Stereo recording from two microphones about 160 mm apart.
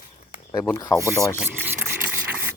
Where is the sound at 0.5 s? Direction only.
25° left (ahead or behind).